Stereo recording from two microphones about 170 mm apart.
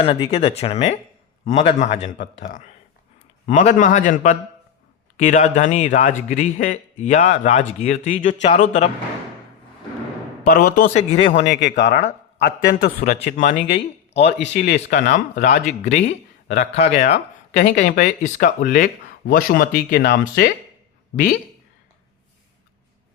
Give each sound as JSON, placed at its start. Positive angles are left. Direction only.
{"t": 0.0, "sound": "speech", "side_deg": 30}
{"t": 10.4, "sound": "speech", "side_deg": 60}
{"t": 10.8, "sound": "speech", "side_deg": 40}
{"t": 11.3, "sound": "speech", "side_deg": 90}
{"t": 13.1, "sound": "speech", "side_deg": 45}
{"t": 14.4, "sound": "speech", "side_deg": 70}